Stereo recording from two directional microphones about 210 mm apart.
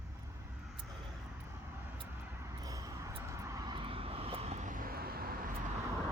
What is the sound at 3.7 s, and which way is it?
Vehicle, 25° right (ahead or behind).